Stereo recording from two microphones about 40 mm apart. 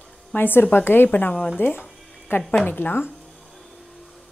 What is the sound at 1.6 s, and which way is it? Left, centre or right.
Speech, left.